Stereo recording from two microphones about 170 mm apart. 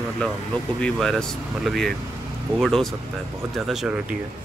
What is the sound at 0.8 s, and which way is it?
Speech, 5° left (ahead or behind).